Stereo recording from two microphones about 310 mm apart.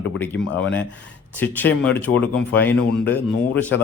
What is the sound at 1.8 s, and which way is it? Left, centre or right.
Speech, centre.